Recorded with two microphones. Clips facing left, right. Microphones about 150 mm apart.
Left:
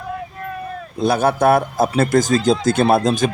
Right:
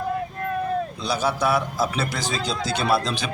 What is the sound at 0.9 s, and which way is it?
Speech, 55° left (ahead or behind).